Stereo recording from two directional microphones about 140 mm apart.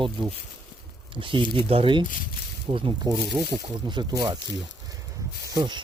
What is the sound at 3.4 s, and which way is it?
Speech, 35° right (ahead or behind).